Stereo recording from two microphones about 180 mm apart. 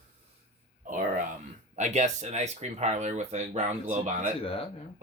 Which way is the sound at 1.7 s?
40° right (ahead or behind).